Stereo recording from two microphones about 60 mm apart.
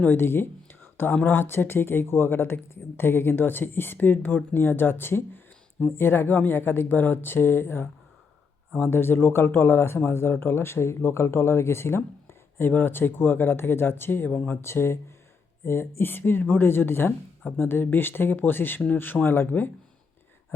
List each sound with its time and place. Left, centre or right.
0.0 s a sound: left
1.1 s speech: left
14.3 s speech: left
14.6 s speech: left